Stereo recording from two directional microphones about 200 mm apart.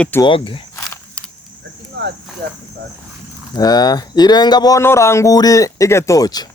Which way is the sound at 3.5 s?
20° left (ahead or behind).